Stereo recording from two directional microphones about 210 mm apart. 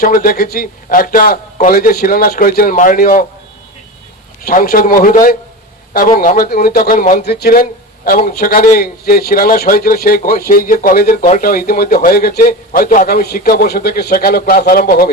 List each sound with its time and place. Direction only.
0.0 s a man's voice: 45° left (ahead or behind)
4.4 s a man's voice: 45° left (ahead or behind)
7.3 s a man's voice: 50° left (ahead or behind)